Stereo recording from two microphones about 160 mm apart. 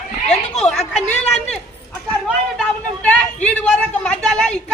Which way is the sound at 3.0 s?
5° left (ahead or behind).